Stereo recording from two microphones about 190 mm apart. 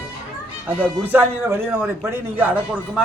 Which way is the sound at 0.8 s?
10° right (ahead or behind).